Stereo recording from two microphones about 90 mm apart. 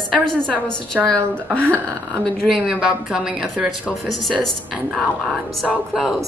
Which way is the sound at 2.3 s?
5° right (ahead or behind).